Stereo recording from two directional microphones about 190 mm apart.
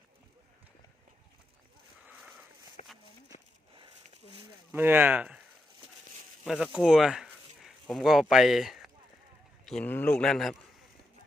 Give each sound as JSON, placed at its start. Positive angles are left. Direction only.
{"t": 2.8, "sound": "a sound", "side_deg": 35}
{"t": 4.7, "sound": "speech", "side_deg": -10}
{"t": 6.4, "sound": "a man's voice", "side_deg": 0}